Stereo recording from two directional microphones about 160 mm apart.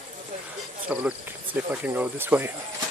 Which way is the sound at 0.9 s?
10° right (ahead or behind).